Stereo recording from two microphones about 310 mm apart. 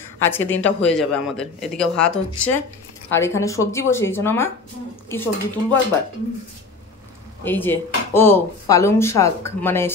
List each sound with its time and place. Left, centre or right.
0.2 s speech: centre
7.4 s speech: centre